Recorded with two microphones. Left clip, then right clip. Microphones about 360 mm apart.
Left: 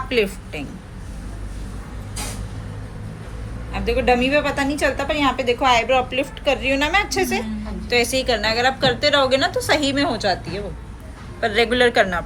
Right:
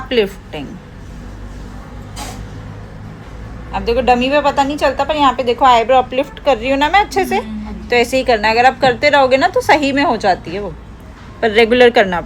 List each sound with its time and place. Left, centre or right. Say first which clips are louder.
0.1 s a woman's voice: right 6 dB; right
3.7 s a woman's voice: right 5 dB; centre